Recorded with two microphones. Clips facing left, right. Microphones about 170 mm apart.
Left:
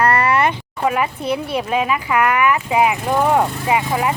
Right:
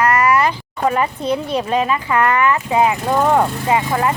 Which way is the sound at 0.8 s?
10° left (ahead or behind).